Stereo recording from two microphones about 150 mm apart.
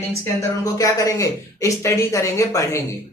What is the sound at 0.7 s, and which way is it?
Speech, 20° left (ahead or behind).